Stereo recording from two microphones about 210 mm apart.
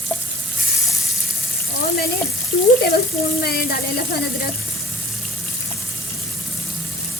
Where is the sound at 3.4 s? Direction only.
50° left (ahead or behind).